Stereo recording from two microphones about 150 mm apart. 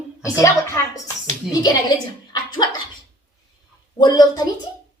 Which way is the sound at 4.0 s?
25° left (ahead or behind).